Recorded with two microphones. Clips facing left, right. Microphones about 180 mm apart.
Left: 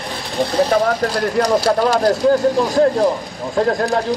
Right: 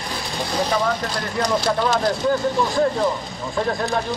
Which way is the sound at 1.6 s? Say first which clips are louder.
Left 5 dB; 35° left (ahead or behind).